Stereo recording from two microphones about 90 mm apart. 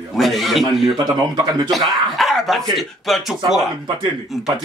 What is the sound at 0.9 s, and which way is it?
Speech, 50° right (ahead or behind).